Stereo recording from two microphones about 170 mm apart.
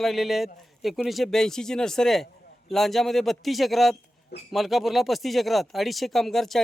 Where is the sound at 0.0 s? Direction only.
Centre (ahead or behind).